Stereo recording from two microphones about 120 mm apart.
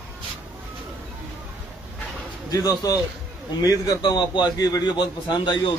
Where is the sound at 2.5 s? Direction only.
30° left (ahead or behind).